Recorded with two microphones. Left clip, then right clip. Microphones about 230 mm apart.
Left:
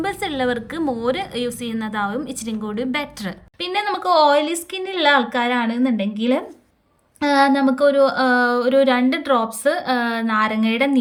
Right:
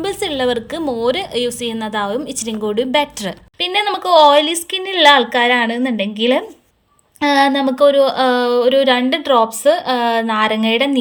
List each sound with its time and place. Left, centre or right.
0.0 s a woman's voice: centre
0.8 s a woman's voice: left
1.0 s a woman's voice: centre